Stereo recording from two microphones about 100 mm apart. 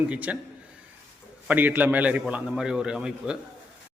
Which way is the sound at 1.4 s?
15° right (ahead or behind).